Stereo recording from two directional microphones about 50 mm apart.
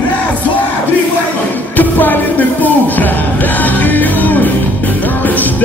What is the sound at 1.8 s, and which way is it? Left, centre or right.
Music, left.